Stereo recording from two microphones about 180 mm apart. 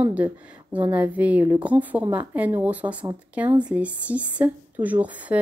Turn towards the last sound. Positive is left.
turn(degrees=-10)  # may be behind; listen again after turning